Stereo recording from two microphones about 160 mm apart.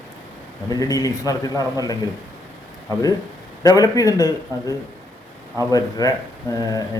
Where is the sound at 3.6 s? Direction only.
25° left (ahead or behind).